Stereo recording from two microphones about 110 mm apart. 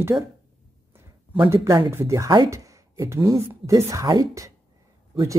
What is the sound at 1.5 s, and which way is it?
A woman's voice, 25° right (ahead or behind).